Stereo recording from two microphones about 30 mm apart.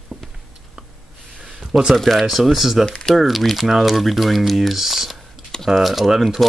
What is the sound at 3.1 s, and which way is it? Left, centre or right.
Speech, centre.